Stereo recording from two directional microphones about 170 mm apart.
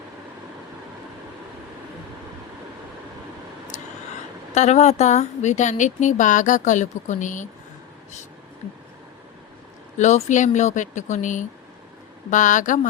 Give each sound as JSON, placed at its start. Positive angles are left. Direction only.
{"t": 3.7, "sound": "vehicle", "side_deg": 45}
{"t": 4.5, "sound": "a woman's voice", "side_deg": 40}
{"t": 10.0, "sound": "a woman's voice", "side_deg": 45}